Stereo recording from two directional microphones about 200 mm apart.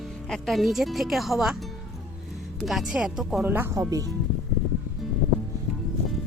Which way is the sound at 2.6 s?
Centre (ahead or behind).